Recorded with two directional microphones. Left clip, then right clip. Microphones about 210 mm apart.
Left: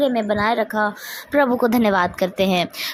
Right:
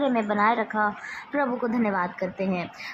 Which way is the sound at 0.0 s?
35° left (ahead or behind).